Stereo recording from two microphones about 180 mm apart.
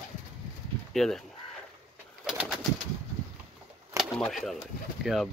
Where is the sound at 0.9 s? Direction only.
Centre (ahead or behind).